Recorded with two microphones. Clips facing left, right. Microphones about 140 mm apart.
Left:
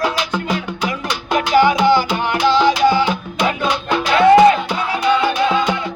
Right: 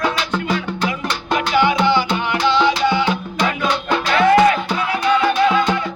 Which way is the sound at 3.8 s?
10° left (ahead or behind).